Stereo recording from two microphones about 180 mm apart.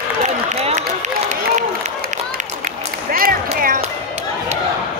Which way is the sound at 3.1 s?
55° right (ahead or behind).